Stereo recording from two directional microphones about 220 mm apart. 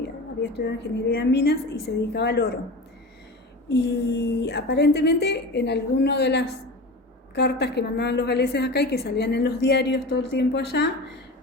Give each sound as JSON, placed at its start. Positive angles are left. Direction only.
{"t": 0.0, "sound": "a woman's voice", "side_deg": 50}
{"t": 3.7, "sound": "a woman's voice", "side_deg": 50}